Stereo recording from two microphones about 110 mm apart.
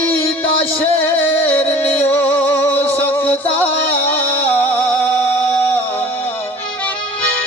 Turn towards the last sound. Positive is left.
turn(degrees=15)  # may be behind; listen again after turning